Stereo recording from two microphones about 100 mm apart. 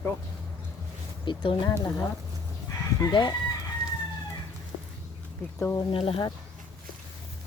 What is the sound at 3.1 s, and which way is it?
Speech, 50° left (ahead or behind).